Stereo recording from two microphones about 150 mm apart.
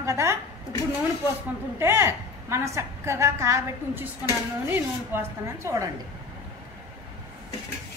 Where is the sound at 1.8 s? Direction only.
15° right (ahead or behind).